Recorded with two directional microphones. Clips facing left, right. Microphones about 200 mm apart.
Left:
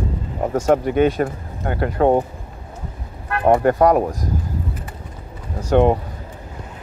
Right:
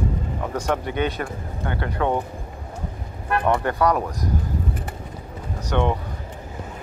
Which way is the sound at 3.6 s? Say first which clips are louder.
Left 6 dB; 40° left (ahead or behind).